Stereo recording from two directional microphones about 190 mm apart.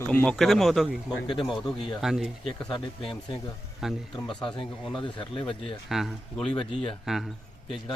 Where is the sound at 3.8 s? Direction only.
Centre (ahead or behind).